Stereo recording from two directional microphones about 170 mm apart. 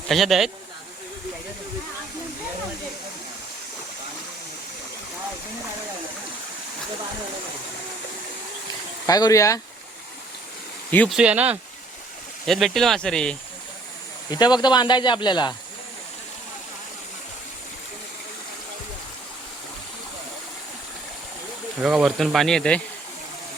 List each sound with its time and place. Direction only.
0.1 s speech: centre (ahead or behind)
9.0 s speech: 20° left (ahead or behind)
10.9 s speech: 5° left (ahead or behind)
11.2 s speech: 10° right (ahead or behind)
14.3 s speech: 25° left (ahead or behind)
21.8 s speech: 5° right (ahead or behind)